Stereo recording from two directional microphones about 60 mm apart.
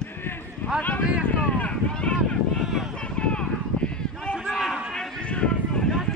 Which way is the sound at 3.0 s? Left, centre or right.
Centre.